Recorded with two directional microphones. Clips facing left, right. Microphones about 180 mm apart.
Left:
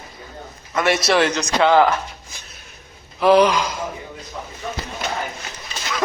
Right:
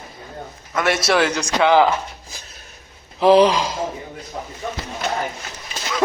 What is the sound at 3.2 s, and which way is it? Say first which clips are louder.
Speech: right 1 dB; 30° right (ahead or behind).